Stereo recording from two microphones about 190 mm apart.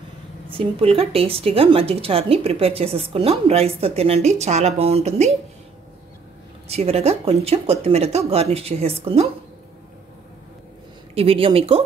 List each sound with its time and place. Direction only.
0.5 s speech: 30° right (ahead or behind)
6.7 s speech: 35° right (ahead or behind)
11.1 s speech: 30° right (ahead or behind)